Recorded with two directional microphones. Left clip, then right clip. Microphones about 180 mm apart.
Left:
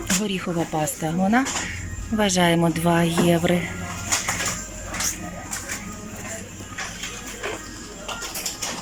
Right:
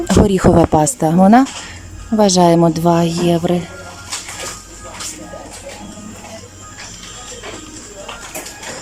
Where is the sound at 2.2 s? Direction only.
20° right (ahead or behind).